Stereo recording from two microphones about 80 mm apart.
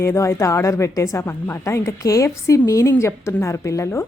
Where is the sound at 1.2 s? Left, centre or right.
Left.